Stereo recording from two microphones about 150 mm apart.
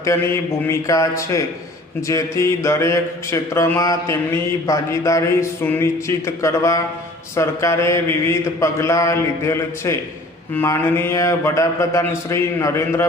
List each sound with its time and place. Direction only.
0.1 s a man's voice: 20° left (ahead or behind)